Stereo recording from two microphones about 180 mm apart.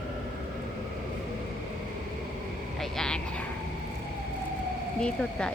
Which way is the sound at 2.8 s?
Centre (ahead or behind).